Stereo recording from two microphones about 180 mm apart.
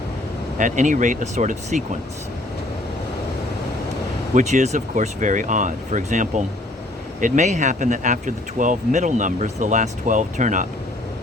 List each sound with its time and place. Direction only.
0.6 s speech: 45° right (ahead or behind)
4.4 s speech: 40° right (ahead or behind)